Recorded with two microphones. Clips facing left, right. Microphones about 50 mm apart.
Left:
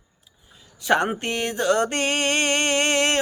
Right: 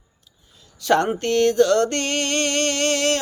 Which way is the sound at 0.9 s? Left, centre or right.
Centre.